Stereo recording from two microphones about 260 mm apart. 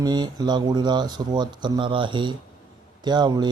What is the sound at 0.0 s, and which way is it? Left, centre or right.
Speech, centre.